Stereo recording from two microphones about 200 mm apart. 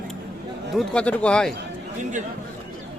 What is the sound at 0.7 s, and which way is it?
Speech, 5° left (ahead or behind).